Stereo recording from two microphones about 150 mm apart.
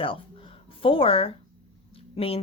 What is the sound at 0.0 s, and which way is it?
A woman's voice, 35° left (ahead or behind).